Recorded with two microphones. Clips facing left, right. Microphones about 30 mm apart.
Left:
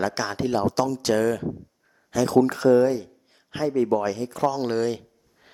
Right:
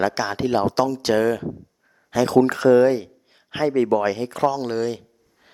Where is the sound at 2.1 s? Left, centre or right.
Right.